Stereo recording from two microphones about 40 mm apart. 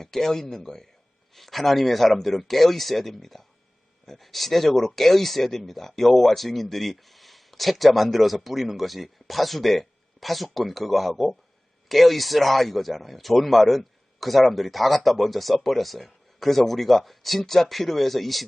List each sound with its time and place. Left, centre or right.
0.0 s speech: centre